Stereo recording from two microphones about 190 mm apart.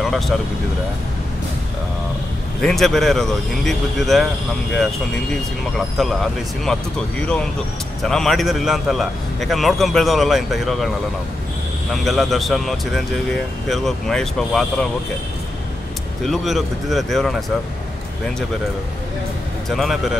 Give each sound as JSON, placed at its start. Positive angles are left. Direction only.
{"t": 0.0, "sound": "speech", "side_deg": 0}
{"t": 2.6, "sound": "speech", "side_deg": 0}
{"t": 5.8, "sound": "speech", "side_deg": 0}
{"t": 11.9, "sound": "speech", "side_deg": 0}
{"t": 16.3, "sound": "speech", "side_deg": 0}
{"t": 19.7, "sound": "speech", "side_deg": 0}